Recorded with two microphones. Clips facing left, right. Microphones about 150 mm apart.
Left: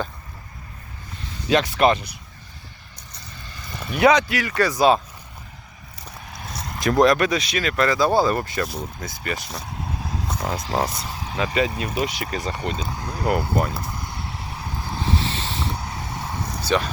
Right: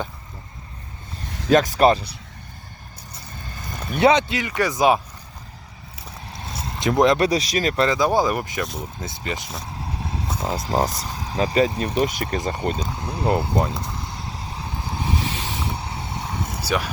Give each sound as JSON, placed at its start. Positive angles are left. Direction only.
{"t": 1.5, "sound": "speech", "side_deg": -45}
{"t": 3.3, "sound": "vehicle", "side_deg": -45}
{"t": 3.9, "sound": "speech", "side_deg": -30}
{"t": 6.3, "sound": "vehicle", "side_deg": -25}
{"t": 7.2, "sound": "speech", "side_deg": -35}
{"t": 7.8, "sound": "speech", "side_deg": -20}
{"t": 10.4, "sound": "speech", "side_deg": -35}
{"t": 13.0, "sound": "speech", "side_deg": -20}
{"t": 14.8, "sound": "vehicle", "side_deg": -15}
{"t": 16.5, "sound": "a sound", "side_deg": -10}